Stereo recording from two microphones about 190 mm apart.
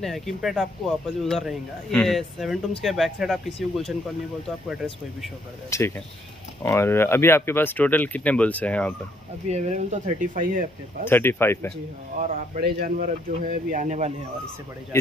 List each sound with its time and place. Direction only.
0.0 s speech: centre (ahead or behind)
5.7 s speech: 15° left (ahead or behind)
9.5 s speech: 40° right (ahead or behind)
11.1 s speech: 10° left (ahead or behind)
12.2 s speech: 50° right (ahead or behind)